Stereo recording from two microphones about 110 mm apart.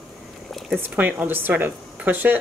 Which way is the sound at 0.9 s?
10° right (ahead or behind).